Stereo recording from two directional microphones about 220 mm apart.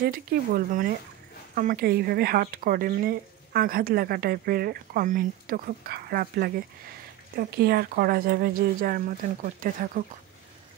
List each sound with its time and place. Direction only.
0.0 s speech: 40° right (ahead or behind)